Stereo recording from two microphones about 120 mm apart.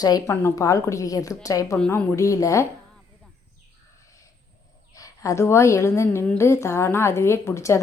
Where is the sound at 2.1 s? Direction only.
25° left (ahead or behind).